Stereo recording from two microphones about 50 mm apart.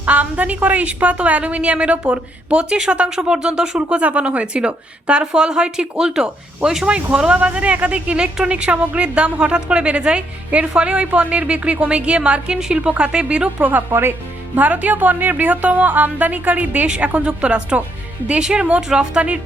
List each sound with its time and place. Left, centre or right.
0.0 s a woman's voice: right
13.9 s a woman's voice: right
16.8 s speech: right